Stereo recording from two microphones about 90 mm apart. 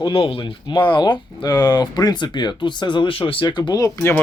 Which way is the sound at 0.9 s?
60° left (ahead or behind).